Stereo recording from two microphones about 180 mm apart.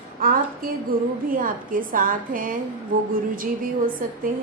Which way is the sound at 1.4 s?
50° right (ahead or behind).